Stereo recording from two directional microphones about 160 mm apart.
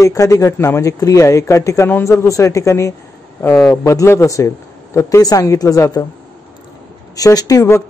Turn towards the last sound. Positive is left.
turn(degrees=20)  # may be behind; listen again after turning